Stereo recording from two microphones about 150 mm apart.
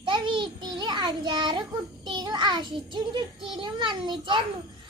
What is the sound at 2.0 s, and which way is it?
A child's voice, 30° right (ahead or behind).